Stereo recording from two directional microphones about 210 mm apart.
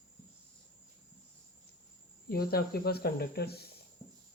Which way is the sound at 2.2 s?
45° left (ahead or behind).